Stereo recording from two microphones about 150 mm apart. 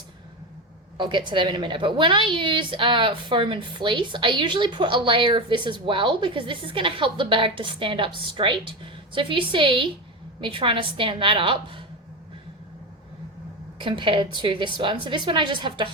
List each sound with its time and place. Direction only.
0.9 s a woman's voice: 30° right (ahead or behind)
13.7 s a woman's voice: 35° right (ahead or behind)